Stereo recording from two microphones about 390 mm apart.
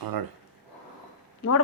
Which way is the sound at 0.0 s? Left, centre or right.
Right.